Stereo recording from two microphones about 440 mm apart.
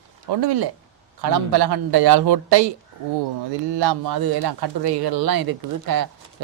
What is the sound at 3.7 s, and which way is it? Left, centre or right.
A man's voice, right.